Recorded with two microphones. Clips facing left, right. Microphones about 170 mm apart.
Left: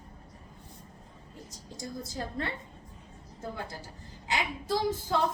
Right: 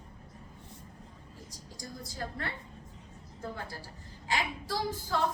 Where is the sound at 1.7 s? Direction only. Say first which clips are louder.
Left 4 dB; 25° left (ahead or behind).